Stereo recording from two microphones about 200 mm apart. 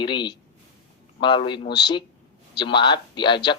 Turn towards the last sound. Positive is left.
turn(degrees=25)  # may be behind; listen again after turning